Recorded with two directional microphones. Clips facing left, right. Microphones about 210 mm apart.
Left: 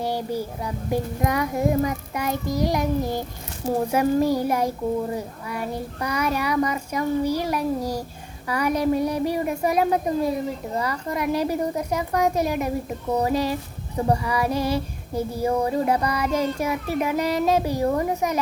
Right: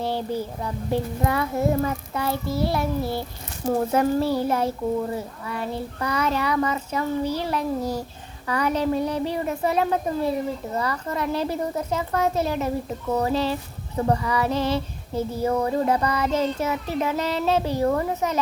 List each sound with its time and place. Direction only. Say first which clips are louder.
0.0 s child singing: even; 10° left (ahead or behind)